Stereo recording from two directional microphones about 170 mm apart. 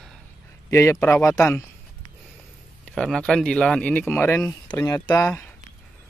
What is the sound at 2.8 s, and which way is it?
Speech, centre (ahead or behind).